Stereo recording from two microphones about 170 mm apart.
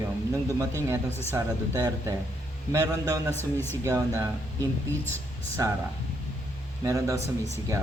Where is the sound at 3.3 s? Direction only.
10° left (ahead or behind).